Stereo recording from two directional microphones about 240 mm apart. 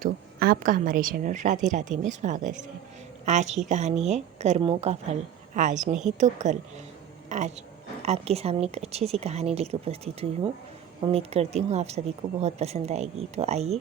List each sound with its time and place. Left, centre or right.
0.0 s a woman's voice: right